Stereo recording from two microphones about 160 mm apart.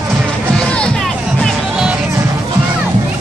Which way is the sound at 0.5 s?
5° left (ahead or behind).